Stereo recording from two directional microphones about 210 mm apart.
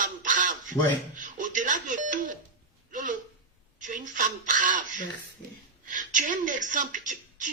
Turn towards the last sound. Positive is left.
turn(degrees=-35)  # may be behind; listen again after turning